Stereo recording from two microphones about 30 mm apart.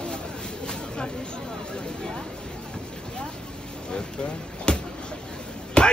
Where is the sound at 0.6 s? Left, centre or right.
Left.